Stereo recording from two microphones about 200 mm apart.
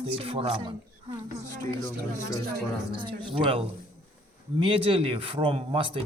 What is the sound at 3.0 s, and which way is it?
Speech, 25° right (ahead or behind).